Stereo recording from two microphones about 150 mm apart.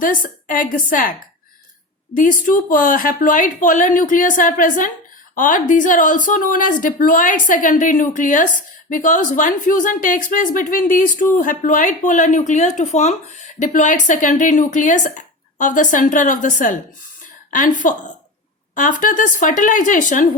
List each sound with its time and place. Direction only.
0.0 s speech: 65° left (ahead or behind)
2.1 s speech: 65° left (ahead or behind)